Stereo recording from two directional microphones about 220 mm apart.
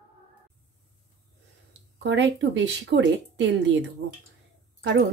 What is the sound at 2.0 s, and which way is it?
Speech, 55° right (ahead or behind).